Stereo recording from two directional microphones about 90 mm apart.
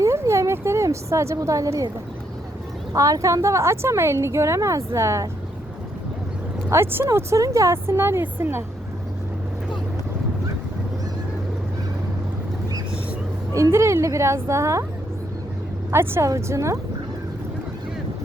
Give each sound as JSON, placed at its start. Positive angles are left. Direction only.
{"t": 0.0, "sound": "a sound", "side_deg": -35}
{"t": 2.9, "sound": "a woman's voice", "side_deg": -40}
{"t": 6.7, "sound": "speech", "side_deg": -25}
{"t": 13.5, "sound": "a woman's voice", "side_deg": -30}
{"t": 15.9, "sound": "a woman's voice", "side_deg": -30}